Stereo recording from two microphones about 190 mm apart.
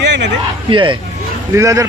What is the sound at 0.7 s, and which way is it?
A man's voice, 25° right (ahead or behind).